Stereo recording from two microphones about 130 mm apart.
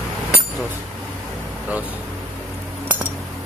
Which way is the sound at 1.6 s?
10° right (ahead or behind).